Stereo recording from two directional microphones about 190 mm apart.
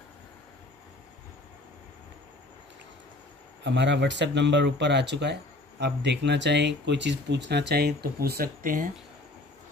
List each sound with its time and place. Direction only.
3.6 s speech: 65° right (ahead or behind); by 8.8 s 50° right (ahead or behind)